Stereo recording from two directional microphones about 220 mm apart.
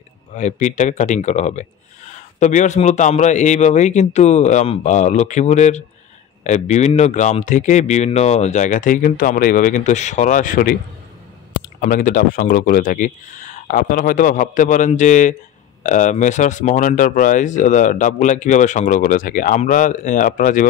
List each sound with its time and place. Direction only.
0.3 s speech: 35° left (ahead or behind)